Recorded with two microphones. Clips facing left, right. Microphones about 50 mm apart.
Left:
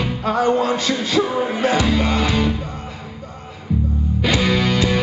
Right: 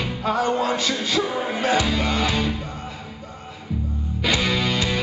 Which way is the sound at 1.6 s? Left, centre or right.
Centre.